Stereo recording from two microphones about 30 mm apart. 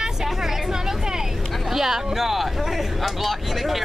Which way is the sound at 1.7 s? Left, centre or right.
Centre.